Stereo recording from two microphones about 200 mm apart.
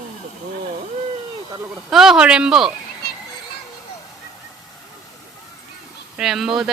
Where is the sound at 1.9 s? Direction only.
Centre (ahead or behind).